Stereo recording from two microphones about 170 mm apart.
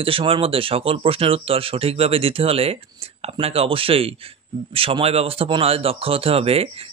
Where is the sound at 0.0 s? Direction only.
30° right (ahead or behind).